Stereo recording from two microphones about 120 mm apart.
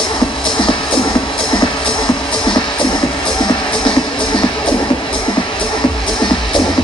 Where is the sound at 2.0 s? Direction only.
40° left (ahead or behind).